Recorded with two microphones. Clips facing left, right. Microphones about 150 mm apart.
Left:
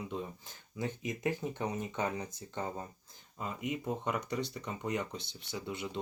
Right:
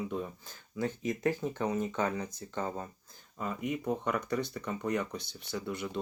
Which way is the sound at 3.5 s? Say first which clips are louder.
Right 3 dB; 20° left (ahead or behind).